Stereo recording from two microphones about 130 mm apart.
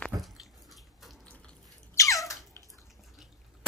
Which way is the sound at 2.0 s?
25° left (ahead or behind).